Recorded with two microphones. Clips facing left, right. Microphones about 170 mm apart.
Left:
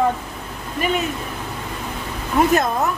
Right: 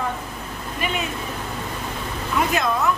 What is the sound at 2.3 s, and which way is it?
Speech, 45° left (ahead or behind).